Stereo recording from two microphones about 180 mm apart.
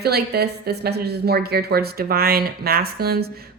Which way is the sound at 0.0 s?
60° right (ahead or behind).